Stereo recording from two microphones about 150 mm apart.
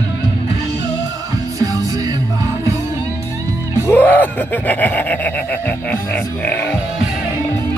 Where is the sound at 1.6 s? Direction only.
25° right (ahead or behind).